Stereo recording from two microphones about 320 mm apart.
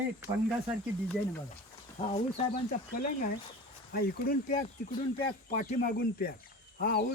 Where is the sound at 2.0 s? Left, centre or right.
Centre.